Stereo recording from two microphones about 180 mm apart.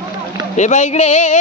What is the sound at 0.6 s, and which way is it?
Music, 40° left (ahead or behind).